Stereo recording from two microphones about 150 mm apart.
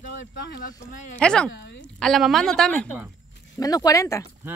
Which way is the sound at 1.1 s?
5° left (ahead or behind).